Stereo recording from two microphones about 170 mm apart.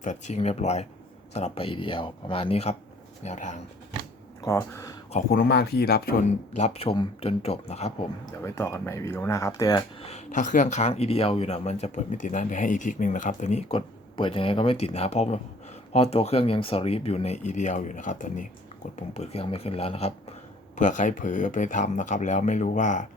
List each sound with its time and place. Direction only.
0.0 s speech: 45° left (ahead or behind)
4.4 s speech: 15° left (ahead or behind)
5.3 s speech: 65° left (ahead or behind)
6.2 s speech: 40° left (ahead or behind)
8.3 s speech: 15° left (ahead or behind)
10.0 s speech: 40° left (ahead or behind)
20.7 s speech: 45° left (ahead or behind)